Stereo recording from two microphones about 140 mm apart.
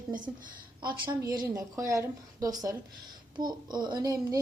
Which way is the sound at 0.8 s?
35° right (ahead or behind).